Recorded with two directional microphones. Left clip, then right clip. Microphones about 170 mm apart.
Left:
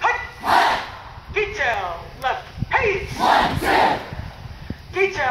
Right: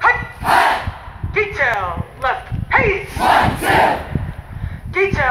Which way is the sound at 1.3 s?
35° left (ahead or behind).